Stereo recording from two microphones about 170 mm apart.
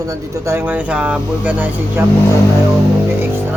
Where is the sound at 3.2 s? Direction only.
10° right (ahead or behind).